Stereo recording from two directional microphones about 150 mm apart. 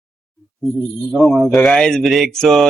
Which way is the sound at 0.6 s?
Centre (ahead or behind).